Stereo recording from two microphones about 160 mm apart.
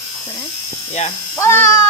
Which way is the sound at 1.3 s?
10° left (ahead or behind).